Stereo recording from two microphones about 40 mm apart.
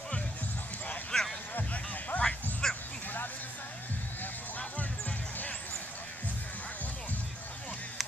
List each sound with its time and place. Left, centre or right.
1.1 s a sound: centre
1.7 s music: left
2.6 s bow-wow: centre